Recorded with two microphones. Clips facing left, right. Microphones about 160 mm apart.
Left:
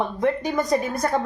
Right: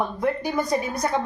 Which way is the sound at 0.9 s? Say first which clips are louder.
Left 2 dB; 50° left (ahead or behind).